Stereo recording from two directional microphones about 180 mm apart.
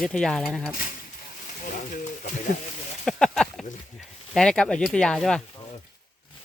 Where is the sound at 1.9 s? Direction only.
45° left (ahead or behind).